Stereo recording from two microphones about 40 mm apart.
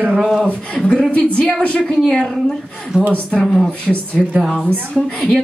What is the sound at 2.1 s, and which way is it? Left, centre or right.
Speech, centre.